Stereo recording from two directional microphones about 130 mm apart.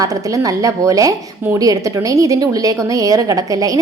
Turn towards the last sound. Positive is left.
turn(degrees=-25)  # may be behind; listen again after turning